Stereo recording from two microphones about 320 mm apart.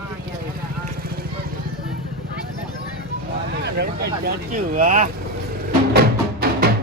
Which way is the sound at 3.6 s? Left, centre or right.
Right.